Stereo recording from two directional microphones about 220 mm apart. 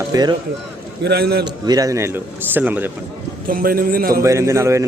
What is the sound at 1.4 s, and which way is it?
A man's voice, 15° right (ahead or behind).